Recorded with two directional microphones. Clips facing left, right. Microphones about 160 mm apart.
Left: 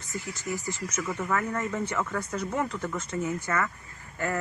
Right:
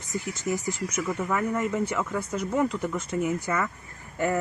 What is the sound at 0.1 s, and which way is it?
Speech, 20° right (ahead or behind).